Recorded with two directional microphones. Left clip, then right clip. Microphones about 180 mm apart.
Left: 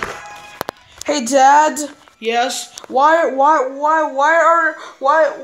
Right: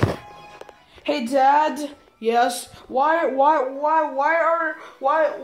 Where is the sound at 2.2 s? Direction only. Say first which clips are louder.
Left 2 dB; 5° right (ahead or behind).